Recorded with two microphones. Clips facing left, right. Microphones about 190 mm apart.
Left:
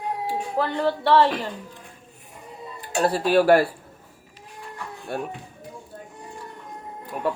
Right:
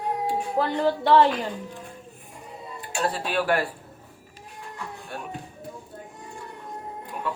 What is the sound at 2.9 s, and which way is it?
Speech, 40° left (ahead or behind).